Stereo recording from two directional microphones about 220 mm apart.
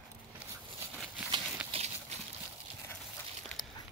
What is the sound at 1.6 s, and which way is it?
Horse, 30° right (ahead or behind).